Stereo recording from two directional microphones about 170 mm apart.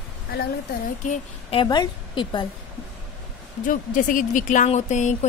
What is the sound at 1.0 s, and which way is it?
Speech, 45° left (ahead or behind).